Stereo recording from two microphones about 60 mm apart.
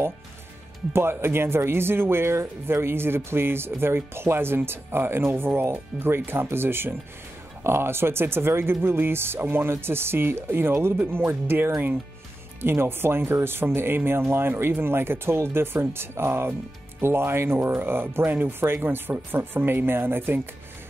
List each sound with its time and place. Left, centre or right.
0.9 s speech: right